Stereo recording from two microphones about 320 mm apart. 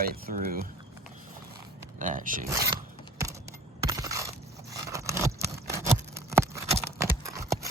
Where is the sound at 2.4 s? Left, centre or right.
Centre.